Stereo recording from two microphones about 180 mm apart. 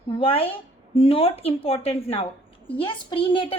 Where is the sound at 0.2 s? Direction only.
30° left (ahead or behind).